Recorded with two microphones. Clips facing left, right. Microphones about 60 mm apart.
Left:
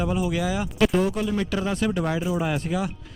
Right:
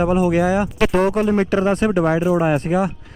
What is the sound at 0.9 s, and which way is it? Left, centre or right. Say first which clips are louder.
Speech: right 7 dB; right.